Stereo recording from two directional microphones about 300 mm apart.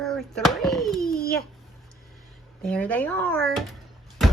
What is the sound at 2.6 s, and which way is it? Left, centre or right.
Speech, centre.